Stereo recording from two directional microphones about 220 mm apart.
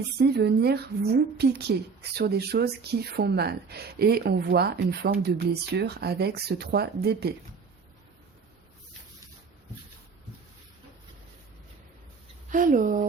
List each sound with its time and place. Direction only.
0.2 s a woman's voice: 45° right (ahead or behind)
12.5 s speech: 35° right (ahead or behind)